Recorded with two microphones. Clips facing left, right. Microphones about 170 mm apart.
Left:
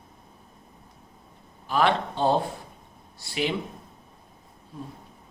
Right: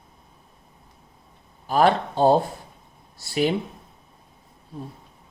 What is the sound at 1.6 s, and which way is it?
Speech, 40° right (ahead or behind).